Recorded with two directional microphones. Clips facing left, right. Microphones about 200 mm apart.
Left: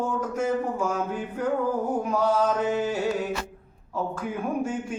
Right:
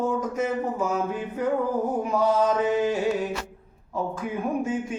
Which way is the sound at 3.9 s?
5° right (ahead or behind).